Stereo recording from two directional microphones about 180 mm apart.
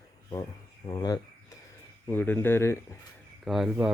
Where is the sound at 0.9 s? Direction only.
20° left (ahead or behind).